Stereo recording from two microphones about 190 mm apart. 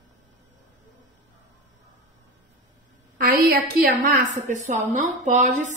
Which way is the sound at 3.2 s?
55° right (ahead or behind).